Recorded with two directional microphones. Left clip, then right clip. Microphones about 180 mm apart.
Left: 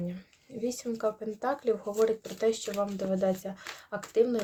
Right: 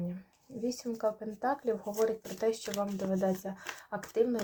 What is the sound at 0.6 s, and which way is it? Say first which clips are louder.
Speech: left 2 dB; 25° left (ahead or behind).